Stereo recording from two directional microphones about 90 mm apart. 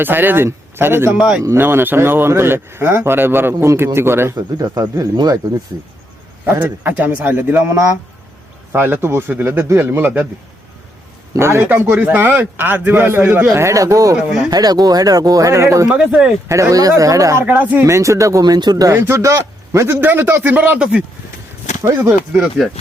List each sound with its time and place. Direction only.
0.0 s speech: 20° right (ahead or behind)
4.4 s speech: 45° right (ahead or behind)
6.4 s speech: 20° right (ahead or behind)
11.3 s speech: 30° right (ahead or behind)
11.7 s speech: 15° right (ahead or behind)
13.5 s speech: 35° right (ahead or behind)
14.2 s speech: 5° right (ahead or behind)
14.5 s speech: 45° right (ahead or behind)
15.9 s speech: 10° right (ahead or behind)
16.5 s speech: 35° right (ahead or behind)
17.4 s speech: 15° right (ahead or behind)
17.8 s speech: 35° right (ahead or behind)
18.9 s a man's voice: 30° right (ahead or behind); by 21.0 s 10° right (ahead or behind)
22.3 s speech: centre (ahead or behind)